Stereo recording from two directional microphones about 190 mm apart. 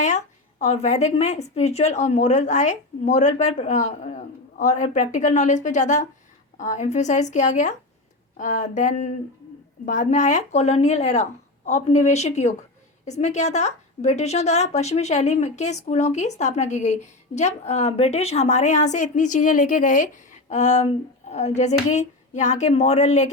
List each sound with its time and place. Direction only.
0.0 s a woman's voice: 40° left (ahead or behind)